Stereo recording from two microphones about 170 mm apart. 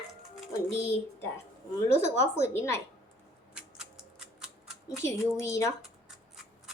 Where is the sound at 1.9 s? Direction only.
40° right (ahead or behind).